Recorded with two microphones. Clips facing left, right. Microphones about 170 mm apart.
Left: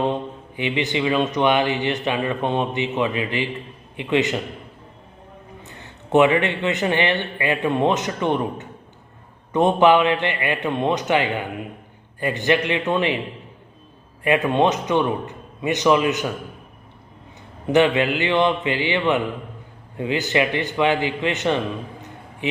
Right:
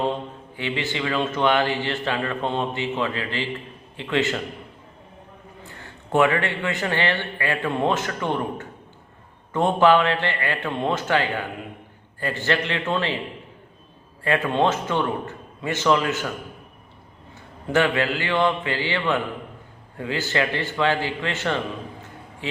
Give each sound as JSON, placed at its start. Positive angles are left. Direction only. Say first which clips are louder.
{"t": 0.0, "sound": "speech", "louder": "left 2 dB", "side_deg": 20}
{"t": 5.6, "sound": "speech", "louder": "even", "side_deg": 20}
{"t": 14.3, "sound": "speech", "louder": "left 3 dB", "side_deg": 15}
{"t": 17.7, "sound": "speech", "louder": "left 4 dB", "side_deg": 20}